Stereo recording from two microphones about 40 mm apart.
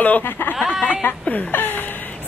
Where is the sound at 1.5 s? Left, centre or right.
Left.